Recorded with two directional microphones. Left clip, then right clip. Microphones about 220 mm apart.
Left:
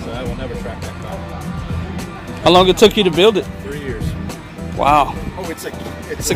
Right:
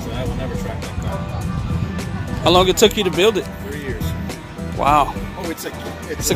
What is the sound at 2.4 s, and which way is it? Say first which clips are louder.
Speech: left 3 dB; 15° left (ahead or behind).